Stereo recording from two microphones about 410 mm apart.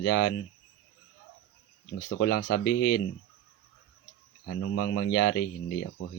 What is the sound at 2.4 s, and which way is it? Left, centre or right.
Speech, left.